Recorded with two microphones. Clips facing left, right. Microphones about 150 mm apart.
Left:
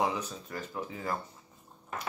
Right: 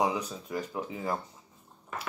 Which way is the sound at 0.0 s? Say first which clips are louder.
Right 2 dB; 15° right (ahead or behind).